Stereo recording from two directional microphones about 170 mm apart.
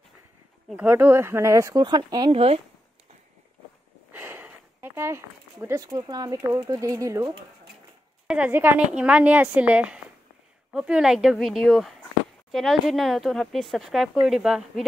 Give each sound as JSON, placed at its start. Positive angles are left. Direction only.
{"t": 0.7, "sound": "speech", "side_deg": -10}
{"t": 2.3, "sound": "speech", "side_deg": -35}
{"t": 4.1, "sound": "speech", "side_deg": -10}